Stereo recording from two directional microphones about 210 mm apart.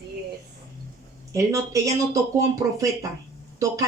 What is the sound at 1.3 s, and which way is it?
A woman's voice, 15° right (ahead or behind).